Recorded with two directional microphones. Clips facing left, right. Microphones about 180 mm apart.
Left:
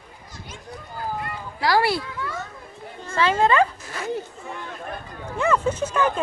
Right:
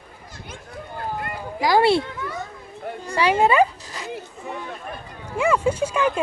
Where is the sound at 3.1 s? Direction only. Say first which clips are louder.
Right 1 dB; 15° right (ahead or behind).